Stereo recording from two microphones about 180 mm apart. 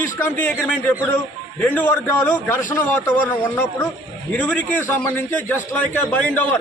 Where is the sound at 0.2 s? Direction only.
10° left (ahead or behind).